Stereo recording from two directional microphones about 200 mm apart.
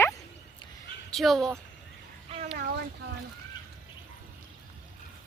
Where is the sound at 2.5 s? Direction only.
55° right (ahead or behind).